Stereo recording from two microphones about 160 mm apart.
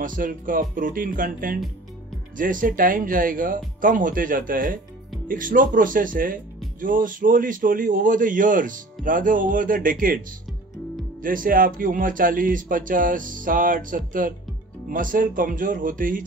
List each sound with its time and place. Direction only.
0.0 s a man's voice: 55° right (ahead or behind)
11.2 s a man's voice: 60° right (ahead or behind)